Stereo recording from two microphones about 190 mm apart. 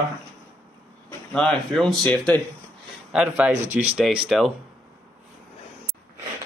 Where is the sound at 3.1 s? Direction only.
5° right (ahead or behind).